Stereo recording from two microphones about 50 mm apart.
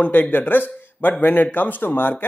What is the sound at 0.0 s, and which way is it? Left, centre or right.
Speech, left.